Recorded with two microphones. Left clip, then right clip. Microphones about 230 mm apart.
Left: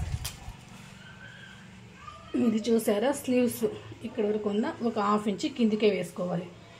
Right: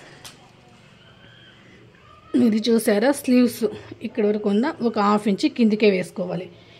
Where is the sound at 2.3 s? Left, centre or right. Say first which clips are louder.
Right 7 dB; right.